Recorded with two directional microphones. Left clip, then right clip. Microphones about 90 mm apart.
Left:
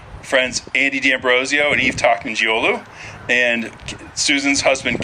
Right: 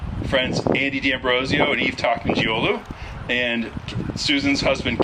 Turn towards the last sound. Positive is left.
turn(degrees=40)  # may be behind; listen again after turning